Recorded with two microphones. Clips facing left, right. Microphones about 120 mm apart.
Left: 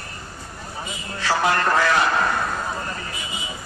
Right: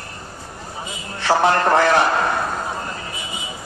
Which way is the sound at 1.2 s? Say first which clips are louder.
Right 4 dB; 25° right (ahead or behind).